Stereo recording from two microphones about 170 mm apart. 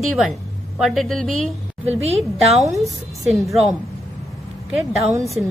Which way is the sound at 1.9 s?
40° right (ahead or behind).